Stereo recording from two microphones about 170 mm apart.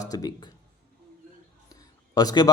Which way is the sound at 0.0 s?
20° left (ahead or behind).